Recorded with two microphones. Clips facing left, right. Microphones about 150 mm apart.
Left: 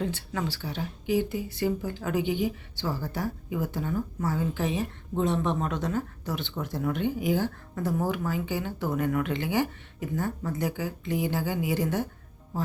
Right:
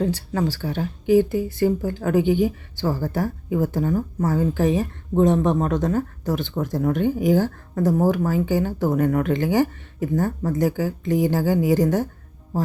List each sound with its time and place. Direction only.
0.0 s speech: 35° right (ahead or behind)